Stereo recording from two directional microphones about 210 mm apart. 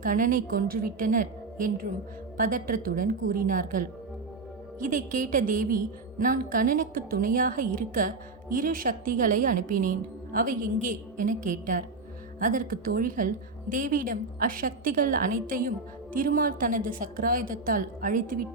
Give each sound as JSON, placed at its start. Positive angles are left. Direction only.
{"t": 0.0, "sound": "a woman's voice", "side_deg": -40}